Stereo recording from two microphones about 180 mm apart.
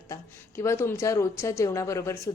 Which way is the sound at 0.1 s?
15° left (ahead or behind).